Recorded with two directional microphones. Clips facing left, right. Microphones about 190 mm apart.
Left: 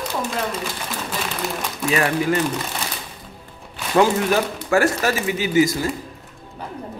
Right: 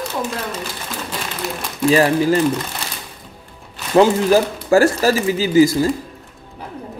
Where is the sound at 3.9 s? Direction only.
30° right (ahead or behind).